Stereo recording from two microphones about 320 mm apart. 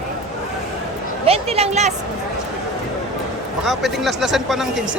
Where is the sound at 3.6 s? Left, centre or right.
Centre.